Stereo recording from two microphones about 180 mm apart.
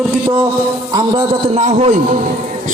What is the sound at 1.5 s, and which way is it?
Speech, 40° right (ahead or behind).